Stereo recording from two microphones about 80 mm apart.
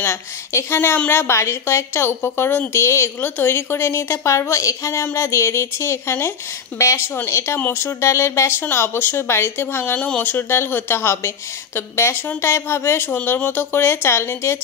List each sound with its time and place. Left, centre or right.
0.0 s a woman's voice: left
6.7 s speech: left
7.2 s a woman's voice: left
9.9 s a woman's voice: centre; by 14.6 s left